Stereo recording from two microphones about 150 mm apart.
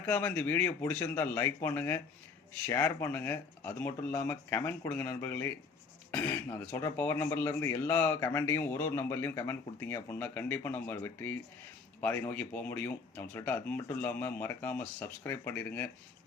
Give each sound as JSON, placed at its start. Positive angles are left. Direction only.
{"t": 0.0, "sound": "speech", "side_deg": 10}